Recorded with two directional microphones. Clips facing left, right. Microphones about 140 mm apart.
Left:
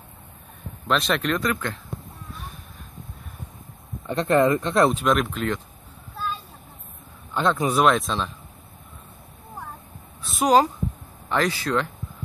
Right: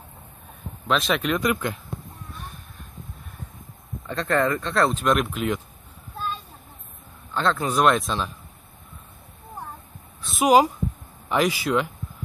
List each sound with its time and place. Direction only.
0.8 s speech: centre (ahead or behind)
1.4 s speech: 15° right (ahead or behind)
4.1 s speech: 20° left (ahead or behind)
4.9 s speech: centre (ahead or behind)
7.3 s speech: 10° left (ahead or behind)
7.8 s speech: centre (ahead or behind)
10.2 s a sound: 5° right (ahead or behind)
11.2 s speech: 10° right (ahead or behind)